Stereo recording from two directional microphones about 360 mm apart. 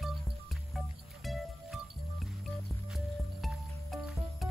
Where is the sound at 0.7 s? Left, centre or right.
Centre.